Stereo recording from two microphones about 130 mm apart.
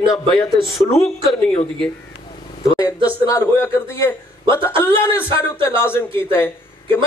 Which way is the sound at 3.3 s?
20° left (ahead or behind).